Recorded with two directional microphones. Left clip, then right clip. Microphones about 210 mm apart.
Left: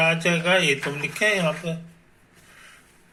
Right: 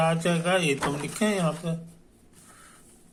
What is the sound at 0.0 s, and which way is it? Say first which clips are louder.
Speech: left 4 dB; 15° right (ahead or behind).